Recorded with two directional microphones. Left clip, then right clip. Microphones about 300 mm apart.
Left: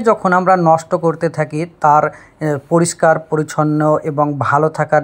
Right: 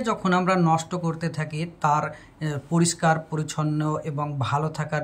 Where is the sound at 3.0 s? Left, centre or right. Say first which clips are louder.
Left 10 dB; left.